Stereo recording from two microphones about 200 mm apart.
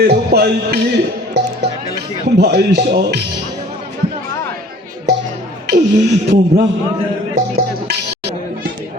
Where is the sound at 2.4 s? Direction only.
55° right (ahead or behind).